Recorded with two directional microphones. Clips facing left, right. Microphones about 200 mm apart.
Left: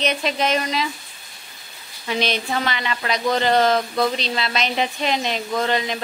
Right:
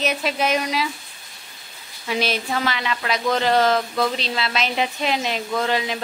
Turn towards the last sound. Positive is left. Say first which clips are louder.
# left 1 dB
turn(degrees=-5)  # may be behind; listen again after turning